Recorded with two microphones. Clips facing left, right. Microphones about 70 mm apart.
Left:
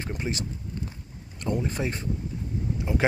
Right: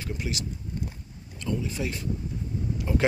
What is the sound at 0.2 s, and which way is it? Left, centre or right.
Speech, left.